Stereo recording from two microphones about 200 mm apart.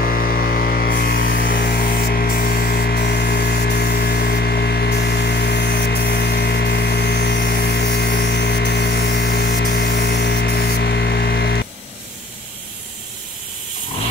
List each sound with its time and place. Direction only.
0.0 s music: 50° left (ahead or behind)